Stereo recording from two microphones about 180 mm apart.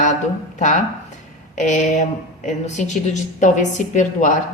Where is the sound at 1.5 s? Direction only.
40° left (ahead or behind).